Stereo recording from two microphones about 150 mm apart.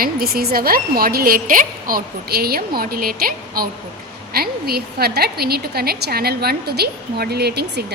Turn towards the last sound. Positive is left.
turn(degrees=-90)